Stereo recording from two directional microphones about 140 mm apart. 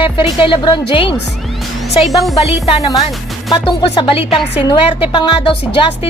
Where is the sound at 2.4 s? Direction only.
45° left (ahead or behind).